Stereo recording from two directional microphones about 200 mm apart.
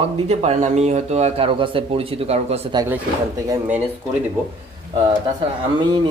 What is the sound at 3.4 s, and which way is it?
Speech, 10° right (ahead or behind).